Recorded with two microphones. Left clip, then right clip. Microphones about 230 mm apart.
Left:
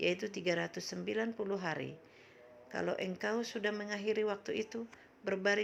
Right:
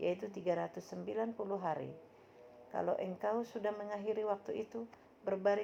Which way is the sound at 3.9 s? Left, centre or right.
Left.